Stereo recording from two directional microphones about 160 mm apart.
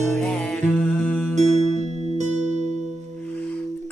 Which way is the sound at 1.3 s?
45° right (ahead or behind).